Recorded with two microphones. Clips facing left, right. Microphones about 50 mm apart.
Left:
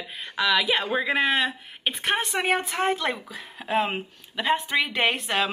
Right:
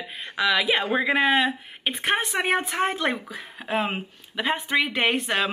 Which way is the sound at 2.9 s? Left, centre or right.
Right.